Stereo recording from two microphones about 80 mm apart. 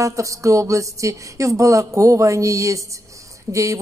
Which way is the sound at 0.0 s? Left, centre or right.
Right.